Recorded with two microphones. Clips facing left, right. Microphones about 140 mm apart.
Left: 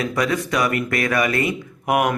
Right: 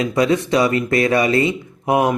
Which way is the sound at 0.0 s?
25° right (ahead or behind).